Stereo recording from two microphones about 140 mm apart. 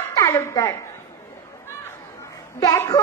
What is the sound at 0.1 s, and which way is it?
Speech, 25° left (ahead or behind).